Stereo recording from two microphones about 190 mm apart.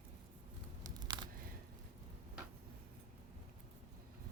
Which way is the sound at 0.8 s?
20° right (ahead or behind).